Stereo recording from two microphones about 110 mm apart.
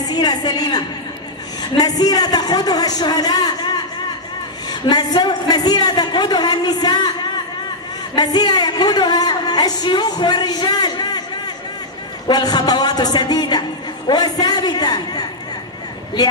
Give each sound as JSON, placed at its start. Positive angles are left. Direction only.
{"t": 0.0, "sound": "a sound", "side_deg": 40}
{"t": 1.6, "sound": "a woman's voice", "side_deg": 35}
{"t": 8.2, "sound": "a woman's voice", "side_deg": 40}